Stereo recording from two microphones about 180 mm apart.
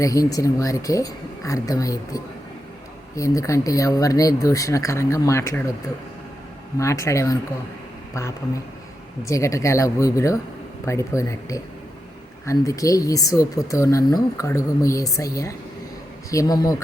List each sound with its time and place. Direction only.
0.0 s speech: 20° left (ahead or behind)
6.7 s speech: 15° left (ahead or behind)
9.2 s speech: 15° left (ahead or behind)